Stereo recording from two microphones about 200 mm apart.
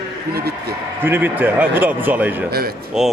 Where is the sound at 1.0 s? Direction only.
10° right (ahead or behind).